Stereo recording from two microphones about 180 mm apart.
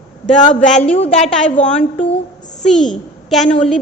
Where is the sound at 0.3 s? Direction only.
45° left (ahead or behind).